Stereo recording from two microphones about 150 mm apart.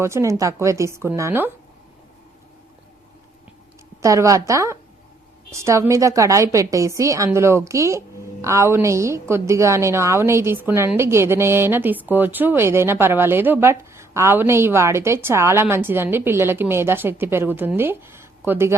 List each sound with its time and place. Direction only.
0.0 s a woman's voice: 20° right (ahead or behind)
4.0 s a woman's voice: 20° right (ahead or behind)